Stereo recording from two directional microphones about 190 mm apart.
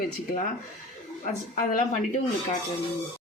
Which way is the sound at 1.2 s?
45° left (ahead or behind).